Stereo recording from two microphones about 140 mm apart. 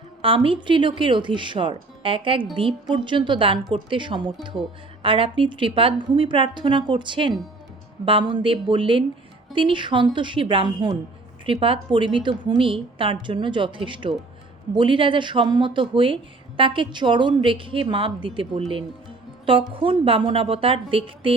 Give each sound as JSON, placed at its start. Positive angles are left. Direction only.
{"t": 0.2, "sound": "a woman's voice", "side_deg": -40}
{"t": 19.7, "sound": "a woman's voice", "side_deg": -40}